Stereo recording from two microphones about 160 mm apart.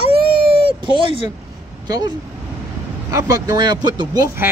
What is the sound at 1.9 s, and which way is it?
Speech, 25° right (ahead or behind).